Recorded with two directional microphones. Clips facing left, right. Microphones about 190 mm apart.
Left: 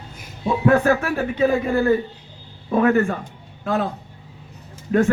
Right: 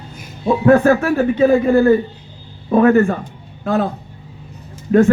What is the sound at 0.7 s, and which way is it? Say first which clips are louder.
A man's voice: right 8 dB; 40° right (ahead or behind).